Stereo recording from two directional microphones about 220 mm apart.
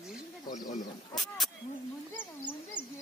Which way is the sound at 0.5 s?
35° left (ahead or behind).